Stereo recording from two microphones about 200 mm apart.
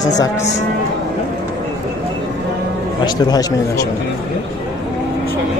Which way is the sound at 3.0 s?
20° left (ahead or behind).